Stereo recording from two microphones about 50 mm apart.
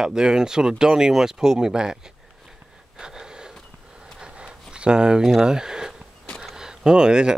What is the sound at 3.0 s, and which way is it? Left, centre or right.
Wheeze, centre.